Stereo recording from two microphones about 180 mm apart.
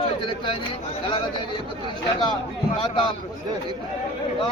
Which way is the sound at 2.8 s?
25° left (ahead or behind).